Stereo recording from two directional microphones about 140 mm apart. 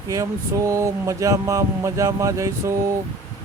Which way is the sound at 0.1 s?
20° right (ahead or behind).